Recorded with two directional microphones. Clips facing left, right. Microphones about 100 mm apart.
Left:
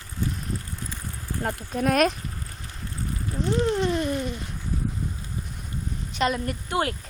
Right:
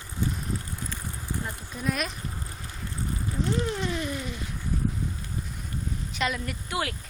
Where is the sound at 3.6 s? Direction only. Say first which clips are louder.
Left 6 dB; 30° left (ahead or behind).